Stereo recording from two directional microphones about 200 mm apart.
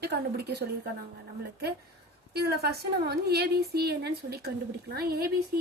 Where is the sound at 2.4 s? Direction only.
50° right (ahead or behind).